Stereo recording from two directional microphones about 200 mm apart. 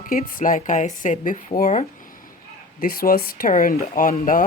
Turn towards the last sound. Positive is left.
turn(degrees=45)  # may be behind; listen again after turning